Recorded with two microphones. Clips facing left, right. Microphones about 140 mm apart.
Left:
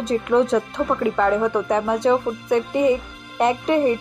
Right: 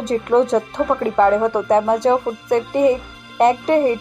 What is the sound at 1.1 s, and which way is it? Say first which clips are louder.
A woman's voice: right 4 dB; 25° right (ahead or behind).